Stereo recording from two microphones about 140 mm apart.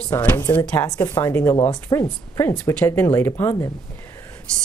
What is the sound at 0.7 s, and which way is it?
Speech, 25° left (ahead or behind).